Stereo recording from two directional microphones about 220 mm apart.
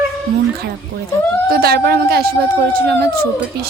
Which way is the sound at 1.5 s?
45° right (ahead or behind).